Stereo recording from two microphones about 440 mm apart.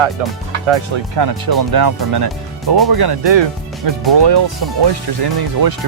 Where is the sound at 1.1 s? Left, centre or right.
Right.